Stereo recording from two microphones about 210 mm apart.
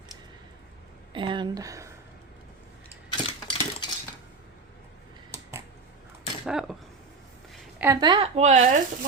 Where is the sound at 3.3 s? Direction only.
25° left (ahead or behind).